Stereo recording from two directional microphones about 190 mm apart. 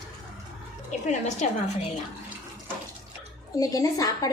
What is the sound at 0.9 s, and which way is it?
Speech, 40° left (ahead or behind).